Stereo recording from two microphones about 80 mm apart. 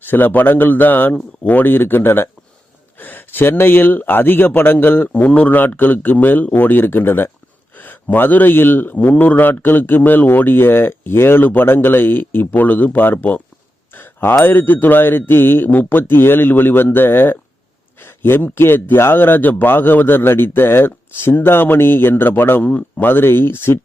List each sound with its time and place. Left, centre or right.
0.0 s a man's voice: left